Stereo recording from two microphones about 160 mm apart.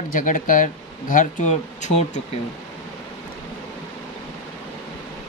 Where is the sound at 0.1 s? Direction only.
55° left (ahead or behind).